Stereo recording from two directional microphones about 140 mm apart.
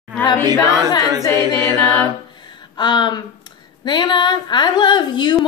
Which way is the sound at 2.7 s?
35° left (ahead or behind).